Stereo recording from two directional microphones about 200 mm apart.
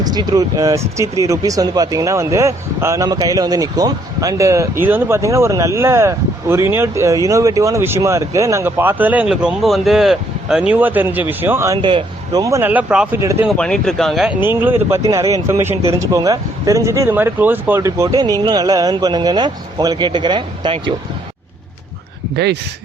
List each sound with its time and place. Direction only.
0.0 s speech: 20° right (ahead or behind)